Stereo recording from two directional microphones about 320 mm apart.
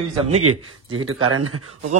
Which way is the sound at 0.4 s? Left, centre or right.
Right.